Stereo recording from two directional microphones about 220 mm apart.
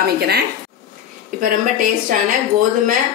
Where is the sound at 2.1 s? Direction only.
40° right (ahead or behind).